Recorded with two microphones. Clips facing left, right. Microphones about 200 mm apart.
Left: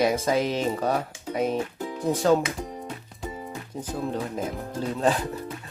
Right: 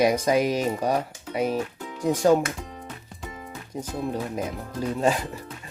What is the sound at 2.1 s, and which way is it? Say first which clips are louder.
Speech: right 2 dB; 15° right (ahead or behind).